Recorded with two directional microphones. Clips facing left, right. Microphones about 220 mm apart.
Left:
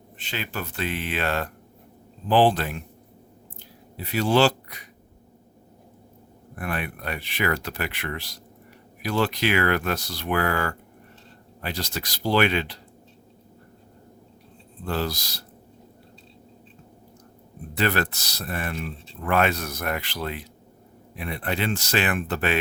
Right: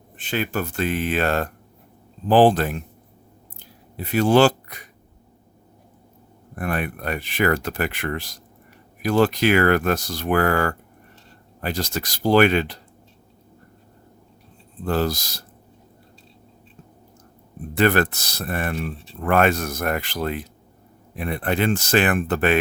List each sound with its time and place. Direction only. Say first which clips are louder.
0.2 s speech: right 8 dB; 50° right (ahead or behind)
3.6 s a sound: right 4 dB; 50° right (ahead or behind)
6.6 s speech: right 5 dB; 45° right (ahead or behind)
14.8 s speech: right 5 dB; 45° right (ahead or behind)
17.7 s speech: right 6 dB; 50° right (ahead or behind)